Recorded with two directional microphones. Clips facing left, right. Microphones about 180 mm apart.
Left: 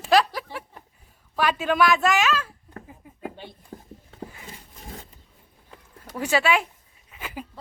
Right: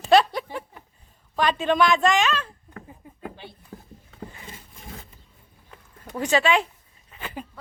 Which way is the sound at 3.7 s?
35° left (ahead or behind).